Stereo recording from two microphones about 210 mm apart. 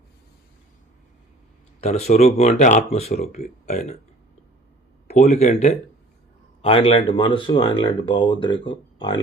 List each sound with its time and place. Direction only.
1.8 s speech: 30° left (ahead or behind)
5.0 s speech: 30° left (ahead or behind)